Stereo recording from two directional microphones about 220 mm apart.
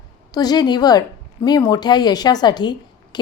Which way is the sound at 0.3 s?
20° left (ahead or behind).